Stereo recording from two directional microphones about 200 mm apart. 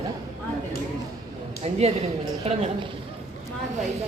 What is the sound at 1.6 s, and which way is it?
Speech, 35° right (ahead or behind).